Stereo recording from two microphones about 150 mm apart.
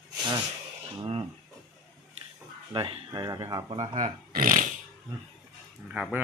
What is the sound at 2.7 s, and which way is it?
Speech, 35° right (ahead or behind).